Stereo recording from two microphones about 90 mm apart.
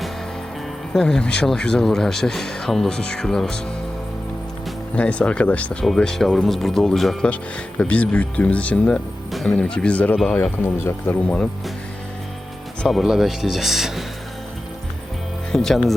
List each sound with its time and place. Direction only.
0.9 s speech: 5° left (ahead or behind)
4.9 s speech: 15° left (ahead or behind)
5.8 s speech: 5° left (ahead or behind)
7.8 s speech: 15° left (ahead or behind)
12.9 s speech: centre (ahead or behind)
15.5 s speech: 5° left (ahead or behind)